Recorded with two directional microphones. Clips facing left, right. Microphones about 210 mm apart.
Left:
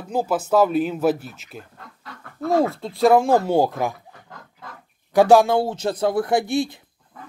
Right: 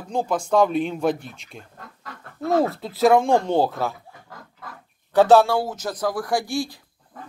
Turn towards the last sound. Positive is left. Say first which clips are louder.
# left 4 dB
turn(degrees=20)  # may be behind; listen again after turning